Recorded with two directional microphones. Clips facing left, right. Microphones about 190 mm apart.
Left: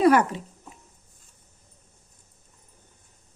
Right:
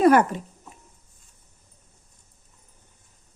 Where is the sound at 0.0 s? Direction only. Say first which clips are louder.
Right 2 dB; 50° right (ahead or behind).